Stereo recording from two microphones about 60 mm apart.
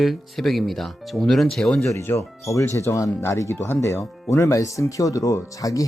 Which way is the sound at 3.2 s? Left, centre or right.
Left.